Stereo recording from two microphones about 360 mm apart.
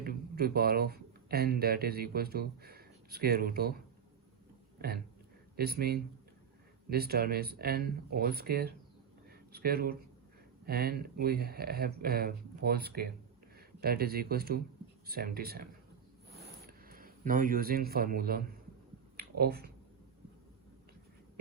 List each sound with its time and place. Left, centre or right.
0.0 s speech: right
5.5 s speech: right
16.6 s speech: right
19.1 s a sound: right